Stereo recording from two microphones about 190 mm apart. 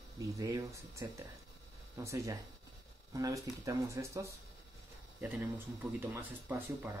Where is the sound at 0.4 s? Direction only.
15° right (ahead or behind).